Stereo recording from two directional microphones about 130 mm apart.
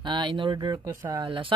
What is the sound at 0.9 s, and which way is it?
Speech, 25° right (ahead or behind).